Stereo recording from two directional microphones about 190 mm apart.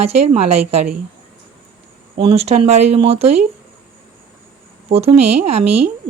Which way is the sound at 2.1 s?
30° right (ahead or behind).